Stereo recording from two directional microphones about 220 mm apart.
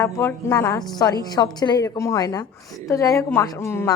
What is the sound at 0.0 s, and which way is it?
A woman's voice, 15° left (ahead or behind).